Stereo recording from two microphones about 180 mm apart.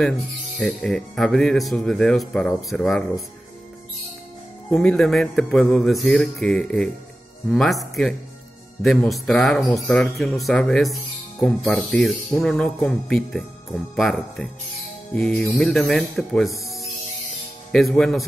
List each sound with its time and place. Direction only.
0.6 s speech: 5° left (ahead or behind)
4.6 s speech: 5° left (ahead or behind)